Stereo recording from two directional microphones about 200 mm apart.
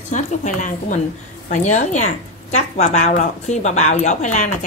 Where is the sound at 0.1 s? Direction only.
40° left (ahead or behind).